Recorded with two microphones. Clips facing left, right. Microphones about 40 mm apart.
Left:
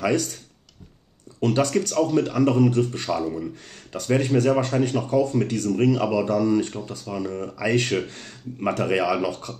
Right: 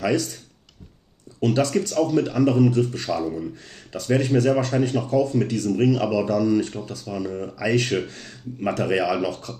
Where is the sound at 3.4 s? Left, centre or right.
Left.